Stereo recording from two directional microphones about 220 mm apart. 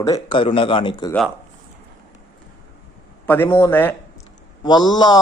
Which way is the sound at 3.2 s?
10° left (ahead or behind).